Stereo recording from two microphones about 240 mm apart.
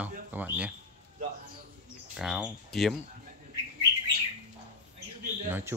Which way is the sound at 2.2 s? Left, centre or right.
Centre.